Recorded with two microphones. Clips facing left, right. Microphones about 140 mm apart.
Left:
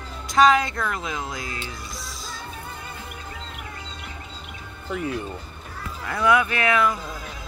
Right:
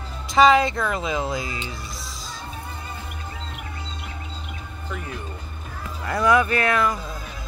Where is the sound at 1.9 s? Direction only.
25° right (ahead or behind).